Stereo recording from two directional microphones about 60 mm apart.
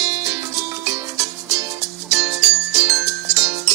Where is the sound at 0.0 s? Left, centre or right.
Right.